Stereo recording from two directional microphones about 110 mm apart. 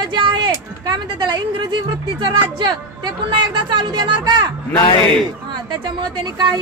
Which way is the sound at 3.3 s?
40° right (ahead or behind).